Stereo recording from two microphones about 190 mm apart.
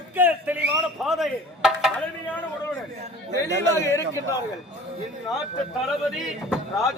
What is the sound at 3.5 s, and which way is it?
Speech, 65° right (ahead or behind).